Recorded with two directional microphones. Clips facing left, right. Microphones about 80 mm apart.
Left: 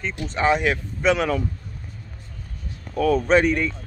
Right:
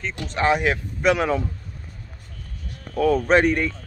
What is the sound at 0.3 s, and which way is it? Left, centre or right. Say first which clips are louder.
Speech: even; centre.